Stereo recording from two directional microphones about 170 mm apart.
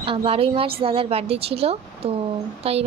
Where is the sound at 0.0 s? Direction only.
30° right (ahead or behind).